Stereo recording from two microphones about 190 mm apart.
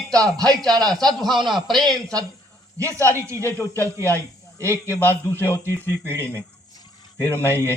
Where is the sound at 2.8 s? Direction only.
15° right (ahead or behind).